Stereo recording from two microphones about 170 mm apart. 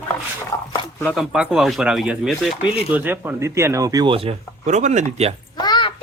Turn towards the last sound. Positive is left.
turn(degrees=25)  # may be behind; listen again after turning